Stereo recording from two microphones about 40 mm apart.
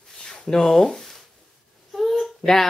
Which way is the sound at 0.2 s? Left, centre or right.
Centre.